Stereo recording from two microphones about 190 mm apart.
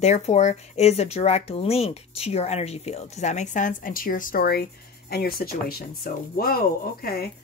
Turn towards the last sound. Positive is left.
turn(degrees=55)  # may be behind; listen again after turning